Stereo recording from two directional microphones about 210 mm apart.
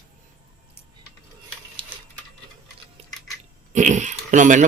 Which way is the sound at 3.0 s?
30° right (ahead or behind).